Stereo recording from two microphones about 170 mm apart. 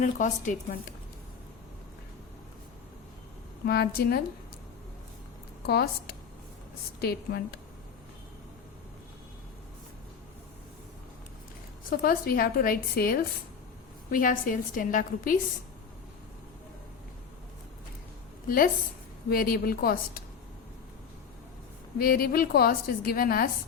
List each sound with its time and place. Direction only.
0.0 s a woman's voice: 50° left (ahead or behind)
3.7 s speech: 70° left (ahead or behind)
5.6 s a woman's voice: 65° left (ahead or behind)
11.9 s a woman's voice: 60° left (ahead or behind)
18.4 s a woman's voice: 55° left (ahead or behind)
21.9 s a woman's voice: 60° left (ahead or behind)